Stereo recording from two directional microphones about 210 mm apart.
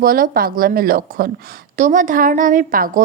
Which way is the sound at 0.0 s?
45° right (ahead or behind).